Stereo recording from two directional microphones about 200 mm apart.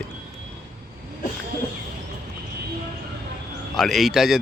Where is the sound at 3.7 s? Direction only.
Centre (ahead or behind).